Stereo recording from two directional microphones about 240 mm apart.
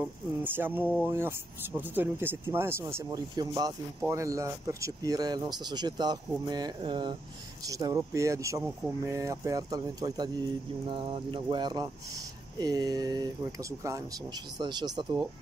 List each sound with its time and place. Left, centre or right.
0.0 s speech: centre